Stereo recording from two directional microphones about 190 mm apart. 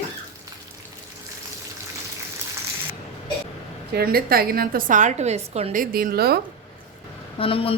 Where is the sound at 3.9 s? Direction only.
55° right (ahead or behind).